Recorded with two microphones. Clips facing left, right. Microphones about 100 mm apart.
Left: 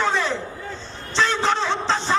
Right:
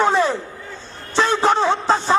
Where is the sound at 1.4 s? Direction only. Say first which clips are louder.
Right 5 dB; 50° right (ahead or behind).